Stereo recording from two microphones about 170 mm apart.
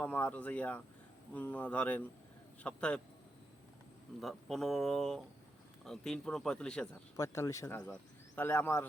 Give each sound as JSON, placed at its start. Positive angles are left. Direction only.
{"t": 0.0, "sound": "speech", "side_deg": 10}
{"t": 4.2, "sound": "speech", "side_deg": 0}
{"t": 7.2, "sound": "speech", "side_deg": 20}